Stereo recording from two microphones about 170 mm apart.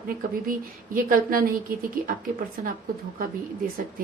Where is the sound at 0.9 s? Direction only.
55° right (ahead or behind).